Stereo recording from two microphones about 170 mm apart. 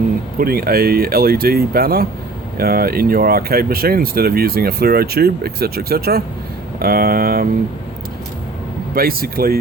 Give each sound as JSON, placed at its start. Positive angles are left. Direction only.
{"t": 0.3, "sound": "speech", "side_deg": -60}
{"t": 9.0, "sound": "speech", "side_deg": -60}